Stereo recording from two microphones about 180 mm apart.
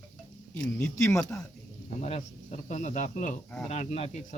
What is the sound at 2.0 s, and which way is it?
Speech, 40° left (ahead or behind).